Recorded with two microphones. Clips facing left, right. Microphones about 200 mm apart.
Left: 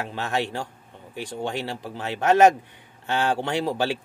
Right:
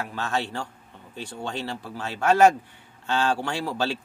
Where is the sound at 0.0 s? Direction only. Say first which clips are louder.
Left 2 dB; 20° left (ahead or behind).